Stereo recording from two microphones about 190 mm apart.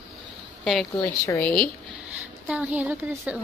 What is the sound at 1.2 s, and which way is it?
Speech, 15° left (ahead or behind).